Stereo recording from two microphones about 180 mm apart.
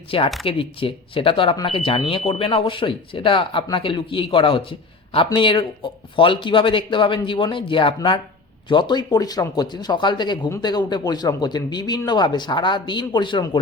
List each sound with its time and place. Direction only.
0.1 s speech: 30° left (ahead or behind)